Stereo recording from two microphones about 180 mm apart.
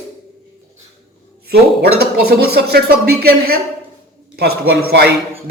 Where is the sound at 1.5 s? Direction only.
60° right (ahead or behind).